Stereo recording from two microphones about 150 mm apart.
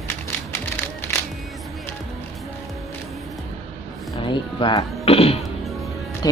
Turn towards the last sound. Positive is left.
turn(degrees=40)  # may be behind; listen again after turning